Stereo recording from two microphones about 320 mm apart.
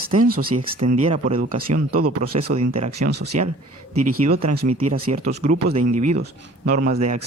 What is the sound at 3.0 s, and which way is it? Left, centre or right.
Speech, right.